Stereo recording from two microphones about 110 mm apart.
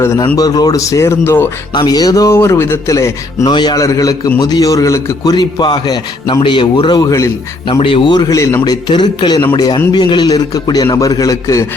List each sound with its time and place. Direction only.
0.3 s speech: 35° left (ahead or behind)
1.7 s speech: 40° left (ahead or behind)
3.4 s a man's voice: 40° left (ahead or behind); by 5.1 s 25° left (ahead or behind)
5.2 s a man's voice: 40° left (ahead or behind)
7.7 s speech: 55° left (ahead or behind)
8.3 s a man's voice: 30° left (ahead or behind)